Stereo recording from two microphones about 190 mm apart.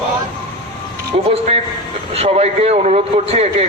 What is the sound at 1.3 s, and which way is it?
A man's voice, 35° right (ahead or behind).